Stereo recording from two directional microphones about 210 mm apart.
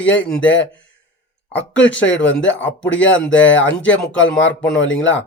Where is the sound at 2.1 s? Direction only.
65° left (ahead or behind).